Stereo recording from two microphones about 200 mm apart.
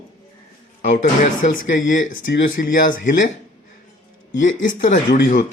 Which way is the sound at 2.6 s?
50° left (ahead or behind).